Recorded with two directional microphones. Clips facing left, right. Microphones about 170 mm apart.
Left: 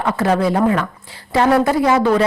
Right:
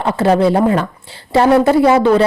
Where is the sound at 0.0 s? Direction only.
30° right (ahead or behind).